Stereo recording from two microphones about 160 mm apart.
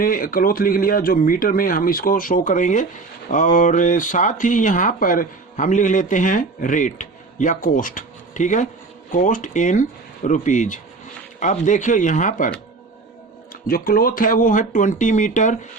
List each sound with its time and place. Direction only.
0.0 s speech: 60° left (ahead or behind)
13.7 s speech: 65° left (ahead or behind); by 15.5 s 50° left (ahead or behind)